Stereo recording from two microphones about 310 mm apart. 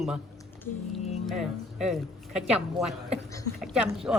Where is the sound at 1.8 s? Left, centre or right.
Centre.